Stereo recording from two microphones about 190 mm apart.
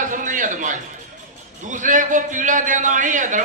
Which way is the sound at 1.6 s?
40° right (ahead or behind).